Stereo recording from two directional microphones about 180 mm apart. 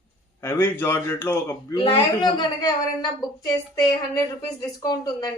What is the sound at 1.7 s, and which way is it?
Speech, 25° left (ahead or behind).